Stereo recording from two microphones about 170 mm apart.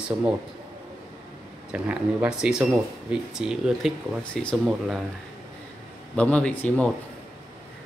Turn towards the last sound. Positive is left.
turn(degrees=10)  # may be behind; listen again after turning